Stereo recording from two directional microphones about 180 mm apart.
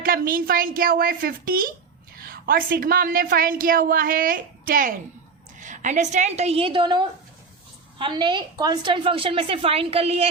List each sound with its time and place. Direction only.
0.0 s a woman's voice: 55° right (ahead or behind); by 10.2 s 35° right (ahead or behind)